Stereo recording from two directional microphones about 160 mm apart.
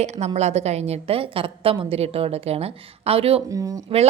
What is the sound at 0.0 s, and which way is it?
A woman's voice, 45° right (ahead or behind).